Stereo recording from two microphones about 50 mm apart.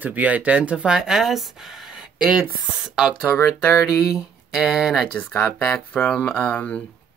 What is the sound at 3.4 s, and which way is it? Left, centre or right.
Speech, left.